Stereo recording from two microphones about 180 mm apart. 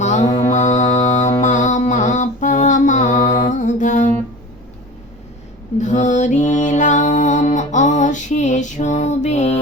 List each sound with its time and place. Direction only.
0.0 s mantra: 40° left (ahead or behind)
0.9 s music: 40° left (ahead or behind)
1.4 s a sound: 40° left (ahead or behind)
3.2 s music: 20° left (ahead or behind)
3.4 s mantra: 45° left (ahead or behind)
5.8 s music: 40° left (ahead or behind)